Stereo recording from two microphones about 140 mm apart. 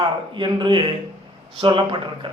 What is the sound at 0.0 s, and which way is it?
A man's voice, 35° right (ahead or behind).